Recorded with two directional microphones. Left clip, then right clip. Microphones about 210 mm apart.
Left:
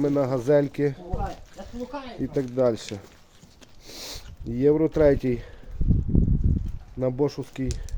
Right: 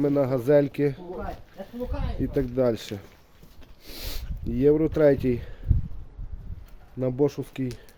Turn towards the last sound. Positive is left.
turn(degrees=0)  # may be behind; listen again after turning